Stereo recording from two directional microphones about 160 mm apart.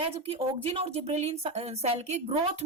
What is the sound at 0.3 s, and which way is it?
A woman's voice, 40° right (ahead or behind).